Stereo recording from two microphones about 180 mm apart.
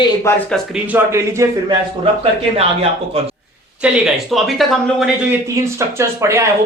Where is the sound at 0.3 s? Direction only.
15° left (ahead or behind).